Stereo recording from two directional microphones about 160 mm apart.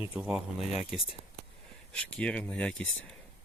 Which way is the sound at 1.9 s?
5° left (ahead or behind).